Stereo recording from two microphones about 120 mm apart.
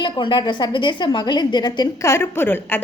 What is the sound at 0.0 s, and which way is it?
A woman's voice, 40° left (ahead or behind).